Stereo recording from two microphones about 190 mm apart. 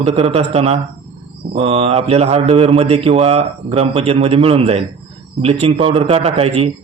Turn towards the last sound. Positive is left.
turn(degrees=-30)  # may be behind; listen again after turning